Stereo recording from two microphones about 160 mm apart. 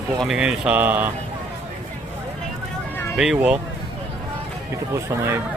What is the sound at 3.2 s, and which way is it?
Speech, 5° right (ahead or behind).